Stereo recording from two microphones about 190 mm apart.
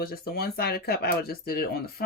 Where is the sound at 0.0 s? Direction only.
55° left (ahead or behind).